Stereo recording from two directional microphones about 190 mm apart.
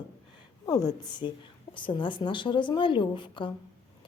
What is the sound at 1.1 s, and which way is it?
A woman's voice, 25° left (ahead or behind).